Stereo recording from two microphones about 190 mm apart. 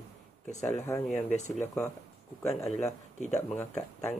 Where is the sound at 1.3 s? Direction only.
40° left (ahead or behind).